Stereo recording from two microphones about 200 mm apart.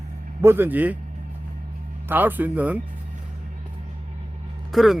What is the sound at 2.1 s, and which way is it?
Speech, 10° right (ahead or behind).